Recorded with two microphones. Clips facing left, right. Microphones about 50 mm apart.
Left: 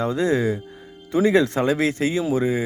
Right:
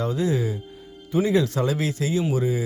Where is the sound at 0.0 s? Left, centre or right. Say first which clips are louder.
Left 3 dB; left.